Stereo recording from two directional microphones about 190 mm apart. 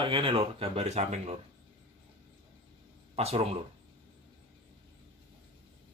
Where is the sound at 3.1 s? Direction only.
35° right (ahead or behind).